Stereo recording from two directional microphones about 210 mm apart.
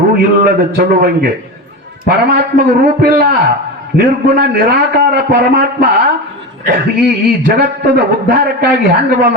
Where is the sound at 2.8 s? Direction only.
45° right (ahead or behind).